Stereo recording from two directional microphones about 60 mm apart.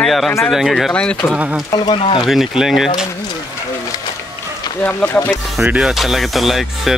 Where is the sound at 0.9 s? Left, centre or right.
Centre.